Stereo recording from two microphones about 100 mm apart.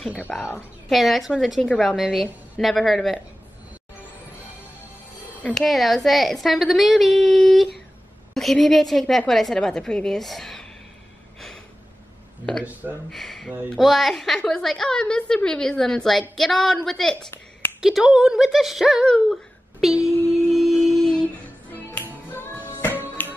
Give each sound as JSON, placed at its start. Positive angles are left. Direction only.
{"t": 0.1, "sound": "a woman's voice", "side_deg": 15}
{"t": 0.8, "sound": "a woman's voice", "side_deg": 0}
{"t": 5.5, "sound": "a woman's voice", "side_deg": 0}
{"t": 11.3, "sound": "a sound", "side_deg": 5}
{"t": 13.1, "sound": "a woman's voice", "side_deg": 5}
{"t": 17.3, "sound": "a sound", "side_deg": 20}
{"t": 17.7, "sound": "a woman's voice", "side_deg": -5}
{"t": 19.8, "sound": "humming", "side_deg": 0}
{"t": 22.3, "sound": "music", "side_deg": 20}